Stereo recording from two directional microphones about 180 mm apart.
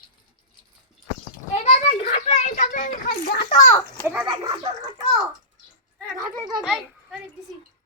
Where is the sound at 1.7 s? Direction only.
35° left (ahead or behind).